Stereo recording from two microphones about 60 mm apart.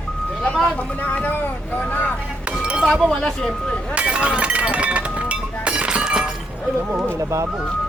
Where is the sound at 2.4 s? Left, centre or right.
Centre.